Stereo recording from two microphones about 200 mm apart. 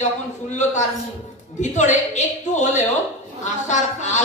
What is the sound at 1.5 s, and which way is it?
A woman's voice, 35° left (ahead or behind).